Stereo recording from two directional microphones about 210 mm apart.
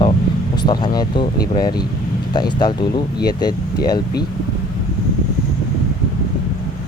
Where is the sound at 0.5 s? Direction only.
20° left (ahead or behind).